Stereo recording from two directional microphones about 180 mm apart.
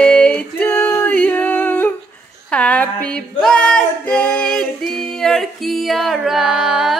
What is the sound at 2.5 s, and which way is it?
Singing, 5° left (ahead or behind).